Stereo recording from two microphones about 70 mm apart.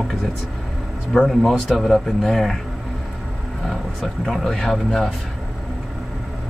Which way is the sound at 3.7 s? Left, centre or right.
Centre.